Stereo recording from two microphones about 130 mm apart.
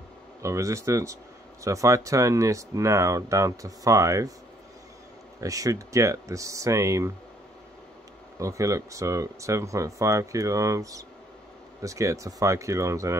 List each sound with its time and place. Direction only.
0.4 s speech: 25° right (ahead or behind)
5.4 s speech: 25° right (ahead or behind)
8.4 s speech: 25° right (ahead or behind)